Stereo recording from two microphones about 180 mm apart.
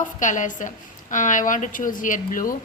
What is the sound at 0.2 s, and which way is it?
Speech, 45° left (ahead or behind).